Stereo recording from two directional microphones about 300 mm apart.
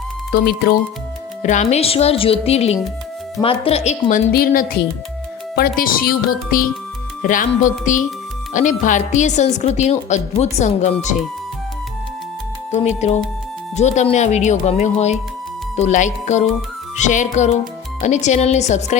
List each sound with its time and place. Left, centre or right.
0.3 s a woman's voice: left
12.7 s a woman's voice: left